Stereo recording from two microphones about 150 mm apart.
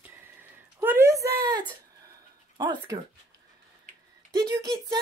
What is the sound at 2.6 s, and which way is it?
Speech, 30° right (ahead or behind).